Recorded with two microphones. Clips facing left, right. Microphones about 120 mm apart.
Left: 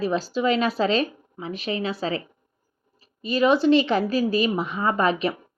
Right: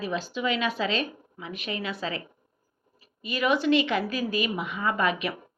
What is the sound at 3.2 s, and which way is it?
A woman's voice, 30° left (ahead or behind).